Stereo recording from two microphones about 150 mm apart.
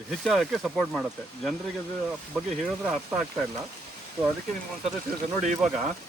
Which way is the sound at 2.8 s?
5° right (ahead or behind).